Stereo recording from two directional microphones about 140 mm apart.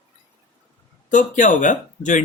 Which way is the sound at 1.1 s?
65° left (ahead or behind).